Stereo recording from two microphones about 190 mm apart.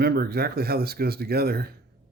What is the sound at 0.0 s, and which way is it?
Speech, 55° right (ahead or behind).